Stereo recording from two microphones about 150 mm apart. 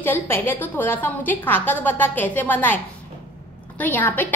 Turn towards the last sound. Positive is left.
turn(degrees=10)  # may be behind; listen again after turning